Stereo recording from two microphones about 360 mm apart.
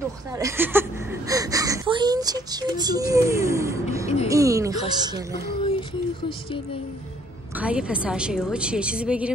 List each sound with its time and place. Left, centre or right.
0.3 s speech: centre
5.6 s a sound: centre
7.5 s a woman's voice: centre